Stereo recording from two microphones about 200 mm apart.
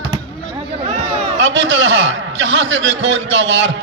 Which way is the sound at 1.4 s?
70° right (ahead or behind).